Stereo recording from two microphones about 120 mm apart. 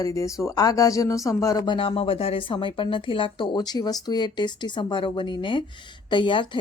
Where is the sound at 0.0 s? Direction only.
25° left (ahead or behind).